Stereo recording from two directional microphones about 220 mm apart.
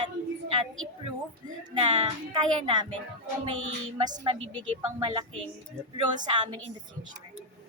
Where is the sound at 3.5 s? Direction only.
65° right (ahead or behind).